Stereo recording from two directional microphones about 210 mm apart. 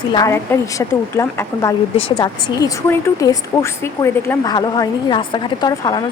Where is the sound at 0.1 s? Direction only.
15° left (ahead or behind).